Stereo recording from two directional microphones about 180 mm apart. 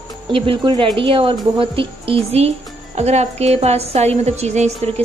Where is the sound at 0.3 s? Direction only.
30° right (ahead or behind).